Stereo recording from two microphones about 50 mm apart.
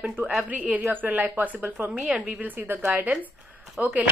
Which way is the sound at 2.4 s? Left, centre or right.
Right.